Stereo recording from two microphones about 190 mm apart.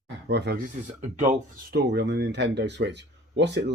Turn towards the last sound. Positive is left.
turn(degrees=-65)  # may be behind; listen again after turning